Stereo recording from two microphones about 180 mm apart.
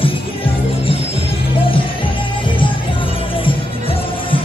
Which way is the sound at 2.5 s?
30° left (ahead or behind).